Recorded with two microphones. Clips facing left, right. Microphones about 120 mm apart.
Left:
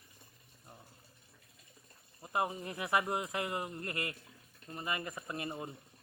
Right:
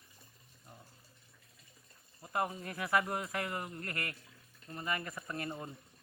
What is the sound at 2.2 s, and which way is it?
Speech, 20° left (ahead or behind).